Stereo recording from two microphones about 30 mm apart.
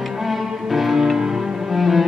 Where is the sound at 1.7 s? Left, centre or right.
Centre.